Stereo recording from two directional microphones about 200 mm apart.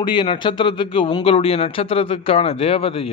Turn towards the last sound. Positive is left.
turn(degrees=30)  # may be behind; listen again after turning